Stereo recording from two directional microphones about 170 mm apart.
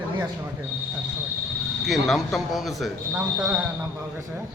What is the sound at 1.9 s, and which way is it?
Speech, centre (ahead or behind).